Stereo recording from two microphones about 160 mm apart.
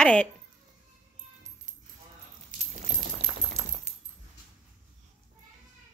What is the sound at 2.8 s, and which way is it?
Coin, 45° right (ahead or behind).